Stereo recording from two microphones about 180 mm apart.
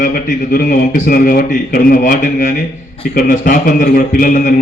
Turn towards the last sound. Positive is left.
turn(degrees=50)  # may be behind; listen again after turning